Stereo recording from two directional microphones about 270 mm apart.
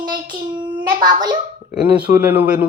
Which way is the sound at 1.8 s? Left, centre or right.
Centre.